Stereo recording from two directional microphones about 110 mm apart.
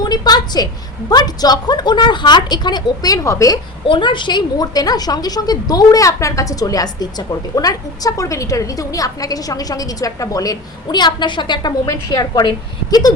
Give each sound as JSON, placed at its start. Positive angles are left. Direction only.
{"t": 0.0, "sound": "a sound", "side_deg": 40}
{"t": 1.1, "sound": "a woman's voice", "side_deg": 35}
{"t": 3.8, "sound": "a woman's voice", "side_deg": 45}